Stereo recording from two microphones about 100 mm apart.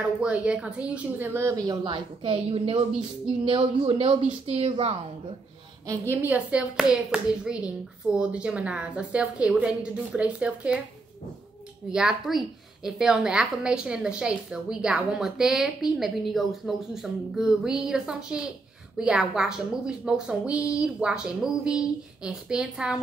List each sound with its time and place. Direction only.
0.2 s a child's voice: 10° right (ahead or behind)
2.2 s speech: 70° right (ahead or behind)
6.0 s a child's voice: 15° right (ahead or behind)
11.9 s a woman's voice: 5° right (ahead or behind)